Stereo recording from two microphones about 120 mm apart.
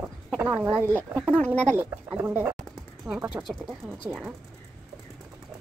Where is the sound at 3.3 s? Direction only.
Centre (ahead or behind).